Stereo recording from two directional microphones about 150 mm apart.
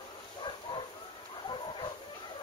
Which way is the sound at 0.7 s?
35° left (ahead or behind).